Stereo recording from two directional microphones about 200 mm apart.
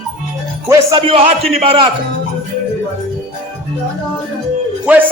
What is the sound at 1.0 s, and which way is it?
Speech, 30° right (ahead or behind).